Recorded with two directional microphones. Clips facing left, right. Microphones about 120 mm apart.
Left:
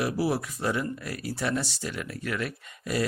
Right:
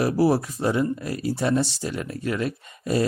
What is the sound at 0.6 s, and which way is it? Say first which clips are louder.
Speech: right 5 dB; 25° right (ahead or behind).